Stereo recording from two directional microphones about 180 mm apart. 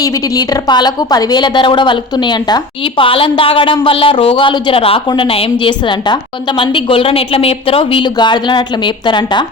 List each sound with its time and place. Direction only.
0.0 s speech: 20° left (ahead or behind)